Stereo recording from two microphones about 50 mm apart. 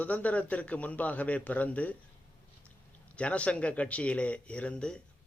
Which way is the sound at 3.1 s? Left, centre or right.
Left.